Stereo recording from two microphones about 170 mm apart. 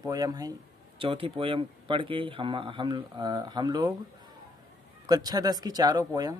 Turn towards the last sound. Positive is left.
turn(degrees=-25)  # may be behind; listen again after turning